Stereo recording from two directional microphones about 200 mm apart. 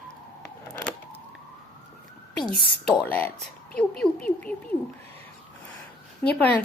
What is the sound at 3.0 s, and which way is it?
Speech, 10° left (ahead or behind).